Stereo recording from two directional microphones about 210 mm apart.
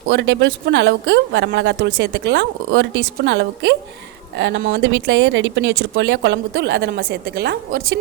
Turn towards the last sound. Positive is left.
turn(degrees=-50)  # may be behind; listen again after turning